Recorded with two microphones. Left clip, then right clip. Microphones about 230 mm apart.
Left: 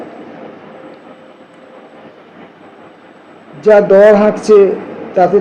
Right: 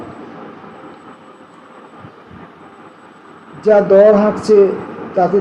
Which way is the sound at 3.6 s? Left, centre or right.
Left.